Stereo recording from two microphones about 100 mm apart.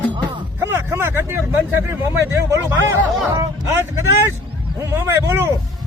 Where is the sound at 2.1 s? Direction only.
20° right (ahead or behind).